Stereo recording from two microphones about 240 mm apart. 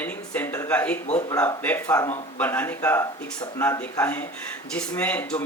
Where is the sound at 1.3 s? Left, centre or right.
Centre.